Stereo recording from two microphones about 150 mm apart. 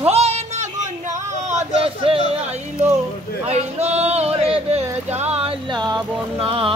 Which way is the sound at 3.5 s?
45° right (ahead or behind).